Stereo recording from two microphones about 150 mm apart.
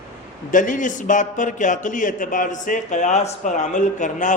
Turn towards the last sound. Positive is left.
turn(degrees=55)  # may be behind; listen again after turning